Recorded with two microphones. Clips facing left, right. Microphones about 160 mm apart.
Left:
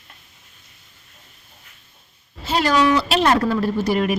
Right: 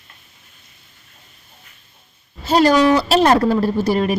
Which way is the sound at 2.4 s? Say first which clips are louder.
Right 5 dB; 40° right (ahead or behind).